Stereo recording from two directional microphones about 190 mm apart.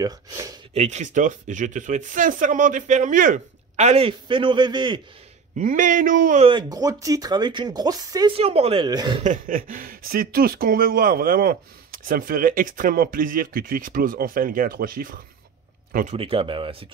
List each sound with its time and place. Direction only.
0.0 s speech: 20° right (ahead or behind)
0.7 s speech: 35° right (ahead or behind)
5.6 s speech: 45° right (ahead or behind)
6.4 s speech: 20° right (ahead or behind)
8.4 s speech: 30° right (ahead or behind)
9.2 s a man's voice: 45° right (ahead or behind)
16.2 s speech: 30° right (ahead or behind)